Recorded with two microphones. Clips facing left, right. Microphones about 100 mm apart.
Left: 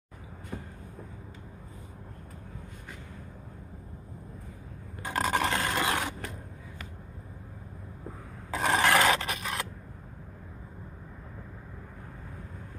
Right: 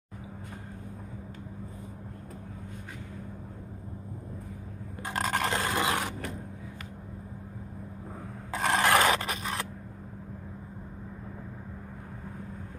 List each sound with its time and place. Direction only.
5.1 s a sound: 10° left (ahead or behind)
5.5 s roar: 15° right (ahead or behind)
8.5 s scrape: 15° left (ahead or behind)
8.8 s scrape: 20° right (ahead or behind)